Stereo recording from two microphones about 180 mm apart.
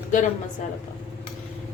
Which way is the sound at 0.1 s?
45° left (ahead or behind).